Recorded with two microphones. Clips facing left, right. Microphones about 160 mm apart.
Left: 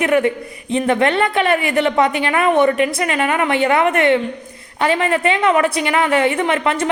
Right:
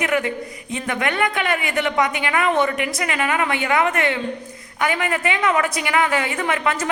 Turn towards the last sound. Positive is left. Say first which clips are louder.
# left 4 dB
turn(degrees=25)  # may be behind; listen again after turning